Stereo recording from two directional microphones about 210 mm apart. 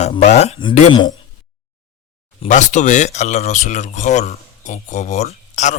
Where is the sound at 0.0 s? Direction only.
30° left (ahead or behind).